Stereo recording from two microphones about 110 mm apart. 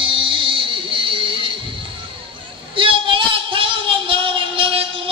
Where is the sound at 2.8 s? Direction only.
50° right (ahead or behind).